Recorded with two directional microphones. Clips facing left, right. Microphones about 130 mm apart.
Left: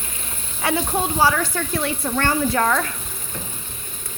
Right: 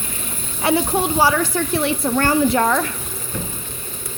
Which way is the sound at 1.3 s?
15° right (ahead or behind).